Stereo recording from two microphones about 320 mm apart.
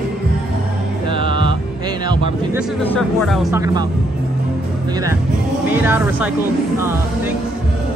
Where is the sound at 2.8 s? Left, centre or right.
Centre.